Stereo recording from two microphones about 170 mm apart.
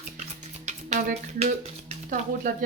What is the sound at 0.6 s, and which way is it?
A woman's voice, 40° right (ahead or behind).